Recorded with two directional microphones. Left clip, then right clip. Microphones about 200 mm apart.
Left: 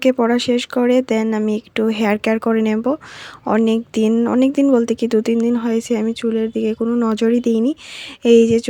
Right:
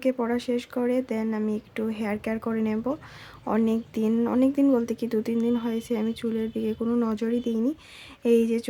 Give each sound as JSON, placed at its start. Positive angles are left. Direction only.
{"t": 0.0, "sound": "speech", "side_deg": 40}